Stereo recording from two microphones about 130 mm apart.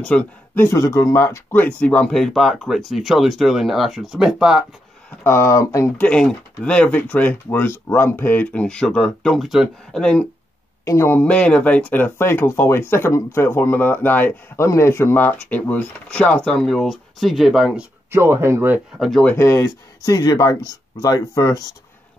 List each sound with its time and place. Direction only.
0.0 s speech: 10° left (ahead or behind); by 4.6 s 5° right (ahead or behind)
5.2 s speech: 20° left (ahead or behind)
6.0 s speech: 5° left (ahead or behind)
10.9 s speech: 20° left (ahead or behind); by 17.8 s centre (ahead or behind)
18.1 s speech: 20° right (ahead or behind)
18.9 s speech: centre (ahead or behind)
19.2 s speech: 20° left (ahead or behind)